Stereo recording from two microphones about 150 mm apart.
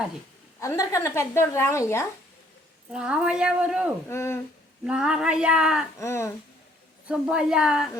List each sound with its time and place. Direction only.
0.6 s a woman's voice: 20° left (ahead or behind)
2.9 s a woman's voice: 5° right (ahead or behind)
4.1 s a woman's voice: 15° left (ahead or behind)
4.9 s a woman's voice: 5° right (ahead or behind)
6.0 s a sound: 20° left (ahead or behind)
7.1 s a woman's voice: 5° right (ahead or behind)